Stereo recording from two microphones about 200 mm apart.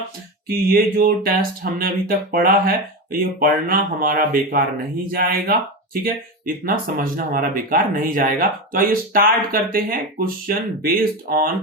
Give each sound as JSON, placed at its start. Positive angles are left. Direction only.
{"t": 0.4, "sound": "speech", "side_deg": -45}